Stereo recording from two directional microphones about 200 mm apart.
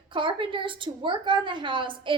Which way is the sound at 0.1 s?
25° right (ahead or behind).